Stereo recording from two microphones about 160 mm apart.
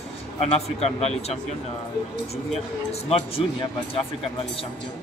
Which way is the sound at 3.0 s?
40° left (ahead or behind).